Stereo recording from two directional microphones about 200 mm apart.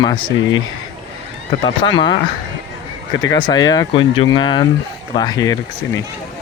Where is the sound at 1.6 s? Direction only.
25° left (ahead or behind).